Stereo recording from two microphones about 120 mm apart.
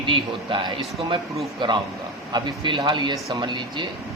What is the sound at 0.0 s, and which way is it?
A man's voice, 45° right (ahead or behind).